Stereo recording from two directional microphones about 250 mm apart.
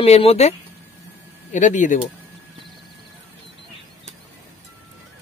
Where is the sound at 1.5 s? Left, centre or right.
Left.